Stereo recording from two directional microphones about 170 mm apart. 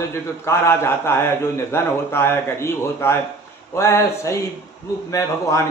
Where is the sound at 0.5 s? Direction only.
15° left (ahead or behind).